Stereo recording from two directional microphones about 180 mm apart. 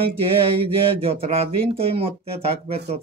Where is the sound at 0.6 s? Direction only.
30° right (ahead or behind).